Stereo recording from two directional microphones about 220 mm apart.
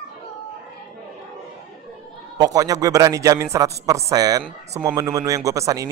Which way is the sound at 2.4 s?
15° right (ahead or behind).